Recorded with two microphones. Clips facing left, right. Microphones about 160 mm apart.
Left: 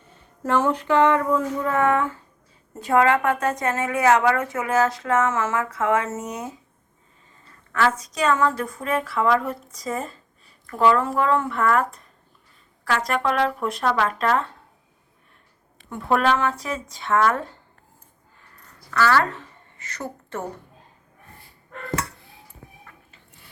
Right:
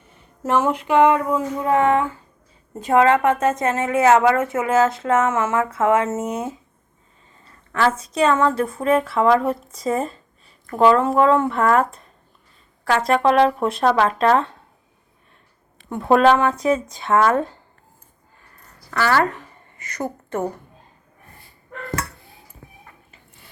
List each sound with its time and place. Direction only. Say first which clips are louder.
0.1 s a sound: right 2 dB; 15° right (ahead or behind)
2.7 s speech: right 3 dB; 20° right (ahead or behind)
7.7 s speech: right 2 dB; 30° right (ahead or behind)
16.1 s speech: right 6 dB; 20° right (ahead or behind)
18.9 s a woman's voice: right 1 dB; 25° right (ahead or behind)